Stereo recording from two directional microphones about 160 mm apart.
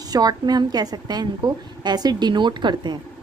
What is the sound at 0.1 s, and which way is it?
A woman's voice, 25° right (ahead or behind).